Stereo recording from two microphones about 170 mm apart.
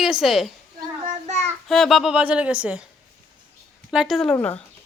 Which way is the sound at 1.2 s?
40° right (ahead or behind).